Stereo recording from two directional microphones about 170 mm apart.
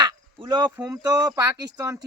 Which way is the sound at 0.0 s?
25° right (ahead or behind).